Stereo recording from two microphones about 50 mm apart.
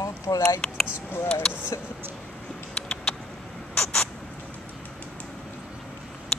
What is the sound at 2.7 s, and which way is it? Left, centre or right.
Vehicle, centre.